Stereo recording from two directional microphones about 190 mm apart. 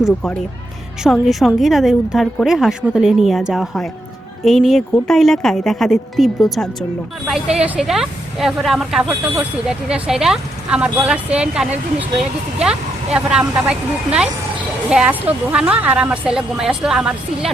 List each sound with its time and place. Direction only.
0.0 s speech: 5° left (ahead or behind)
13.4 s speech: 20° right (ahead or behind)
13.7 s speech: 5° right (ahead or behind)